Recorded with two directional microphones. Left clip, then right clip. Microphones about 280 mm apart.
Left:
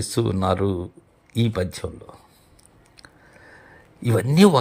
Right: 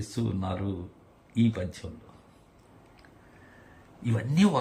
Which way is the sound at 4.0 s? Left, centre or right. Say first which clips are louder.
Left 11 dB; centre.